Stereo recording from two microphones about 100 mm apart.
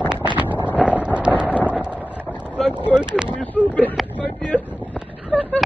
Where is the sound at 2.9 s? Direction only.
10° right (ahead or behind).